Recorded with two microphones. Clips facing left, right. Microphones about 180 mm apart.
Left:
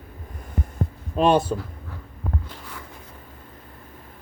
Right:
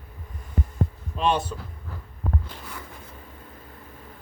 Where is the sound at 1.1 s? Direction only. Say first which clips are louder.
Left 6 dB; 45° left (ahead or behind).